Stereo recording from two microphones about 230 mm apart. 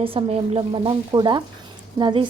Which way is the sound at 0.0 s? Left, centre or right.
Right.